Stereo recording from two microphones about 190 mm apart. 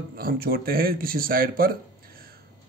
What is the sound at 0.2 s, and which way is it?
Speech, 50° right (ahead or behind).